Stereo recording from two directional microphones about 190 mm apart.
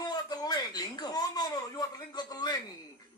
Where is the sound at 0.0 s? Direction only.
20° left (ahead or behind).